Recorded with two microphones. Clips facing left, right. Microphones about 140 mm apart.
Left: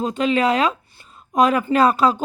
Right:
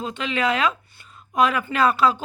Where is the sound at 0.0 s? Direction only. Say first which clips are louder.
Left 6 dB; 40° left (ahead or behind).